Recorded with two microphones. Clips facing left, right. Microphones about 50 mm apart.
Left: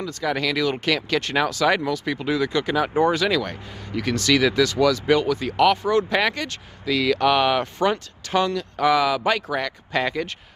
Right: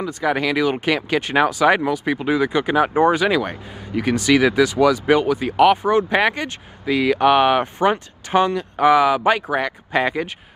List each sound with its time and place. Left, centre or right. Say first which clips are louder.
0.0 s speech: right 4 dB; right